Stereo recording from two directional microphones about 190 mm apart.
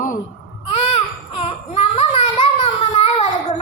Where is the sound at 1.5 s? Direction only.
30° left (ahead or behind).